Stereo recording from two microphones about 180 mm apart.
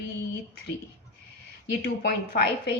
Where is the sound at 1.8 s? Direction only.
60° left (ahead or behind).